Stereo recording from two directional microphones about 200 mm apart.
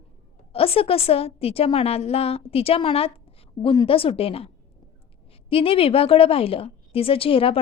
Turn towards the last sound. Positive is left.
turn(degrees=30)  # may be behind; listen again after turning